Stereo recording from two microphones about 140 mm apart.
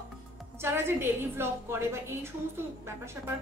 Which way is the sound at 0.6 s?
15° right (ahead or behind).